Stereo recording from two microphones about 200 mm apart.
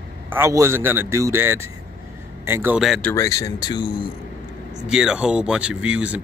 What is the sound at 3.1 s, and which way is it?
Speech, 15° left (ahead or behind).